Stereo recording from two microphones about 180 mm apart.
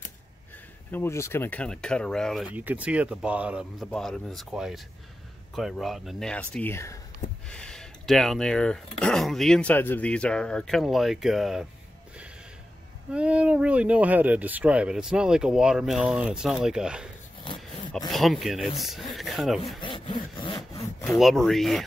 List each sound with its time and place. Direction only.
0.9 s speech: 15° left (ahead or behind)
2.5 s speech: 10° right (ahead or behind)
13.1 s speech: 5° right (ahead or behind)
18.1 s speech: centre (ahead or behind)
19.8 s sawing: 25° left (ahead or behind)
21.2 s speech: centre (ahead or behind)